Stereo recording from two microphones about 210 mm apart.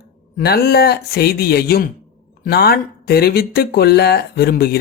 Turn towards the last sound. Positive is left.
turn(degrees=50)  # may be behind; listen again after turning